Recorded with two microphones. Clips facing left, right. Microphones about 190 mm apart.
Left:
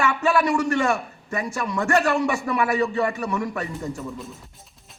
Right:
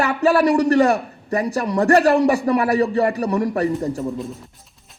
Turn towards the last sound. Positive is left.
turn(degrees=-35)  # may be behind; listen again after turning